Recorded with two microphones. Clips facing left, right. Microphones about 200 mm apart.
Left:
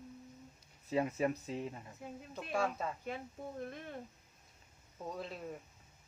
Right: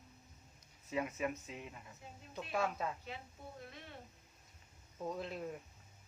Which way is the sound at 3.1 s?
50° left (ahead or behind).